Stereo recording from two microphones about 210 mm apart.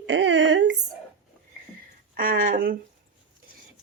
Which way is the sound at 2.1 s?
40° right (ahead or behind).